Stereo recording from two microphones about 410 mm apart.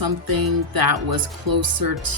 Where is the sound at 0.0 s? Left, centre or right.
Right.